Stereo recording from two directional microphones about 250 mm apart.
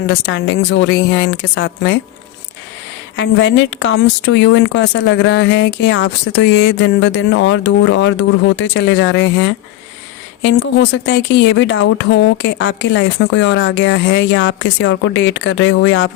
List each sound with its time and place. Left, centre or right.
0.1 s a woman's voice: left
3.2 s a woman's voice: left